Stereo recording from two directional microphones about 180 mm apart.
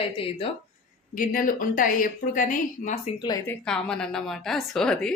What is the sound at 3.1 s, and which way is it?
Speech, 25° left (ahead or behind).